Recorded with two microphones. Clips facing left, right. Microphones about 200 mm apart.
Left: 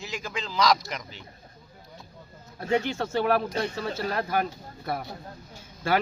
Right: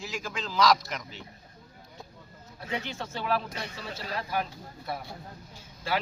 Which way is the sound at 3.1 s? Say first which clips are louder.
Left 6 dB; 55° left (ahead or behind).